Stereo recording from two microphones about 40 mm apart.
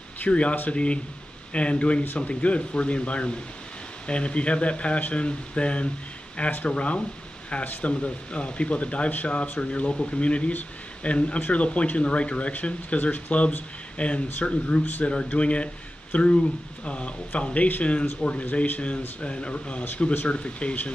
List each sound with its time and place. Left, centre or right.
0.2 s speech: left